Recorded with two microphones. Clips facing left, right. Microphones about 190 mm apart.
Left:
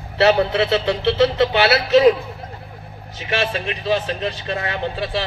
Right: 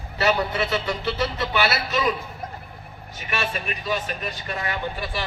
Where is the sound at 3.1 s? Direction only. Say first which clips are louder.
Left 6 dB; 80° left.